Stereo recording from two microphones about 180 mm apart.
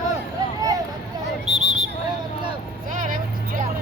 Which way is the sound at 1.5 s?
40° right (ahead or behind).